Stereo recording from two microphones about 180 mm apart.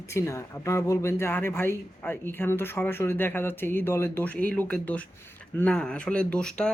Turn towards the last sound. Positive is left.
turn(degrees=5)  # may be behind; listen again after turning